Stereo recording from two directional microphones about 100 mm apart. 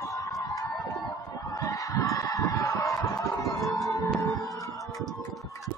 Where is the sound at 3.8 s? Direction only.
35° left (ahead or behind).